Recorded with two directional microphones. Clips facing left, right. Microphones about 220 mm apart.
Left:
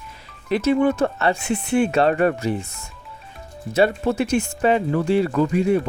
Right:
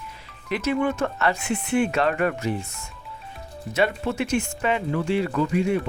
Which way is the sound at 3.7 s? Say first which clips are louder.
Left 5 dB; 35° left (ahead or behind).